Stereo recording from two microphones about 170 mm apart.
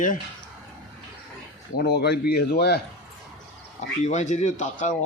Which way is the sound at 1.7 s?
75° left (ahead or behind).